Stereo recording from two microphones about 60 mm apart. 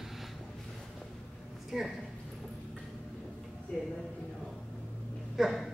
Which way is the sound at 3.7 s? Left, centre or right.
Centre.